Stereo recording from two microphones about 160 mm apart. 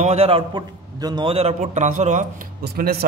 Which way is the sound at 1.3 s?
45° right (ahead or behind).